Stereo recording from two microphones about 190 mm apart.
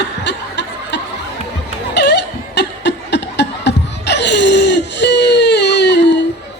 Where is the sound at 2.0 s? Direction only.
65° left (ahead or behind).